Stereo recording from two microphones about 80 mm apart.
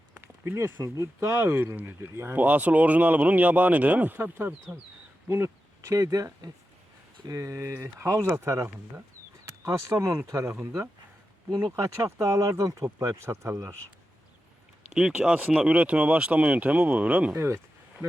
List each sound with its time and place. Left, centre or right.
0.2 s speech: right
5.3 s a sound: right
5.9 s speech: right
11.5 s speech: right
14.9 s speech: centre
17.3 s speech: right